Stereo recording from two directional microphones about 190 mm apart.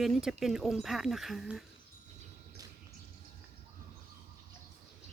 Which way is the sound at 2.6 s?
20° right (ahead or behind).